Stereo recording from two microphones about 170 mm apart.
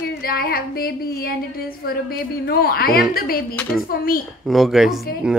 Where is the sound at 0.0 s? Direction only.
60° left (ahead or behind).